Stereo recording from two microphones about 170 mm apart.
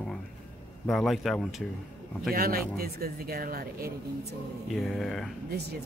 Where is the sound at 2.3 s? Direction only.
60° right (ahead or behind).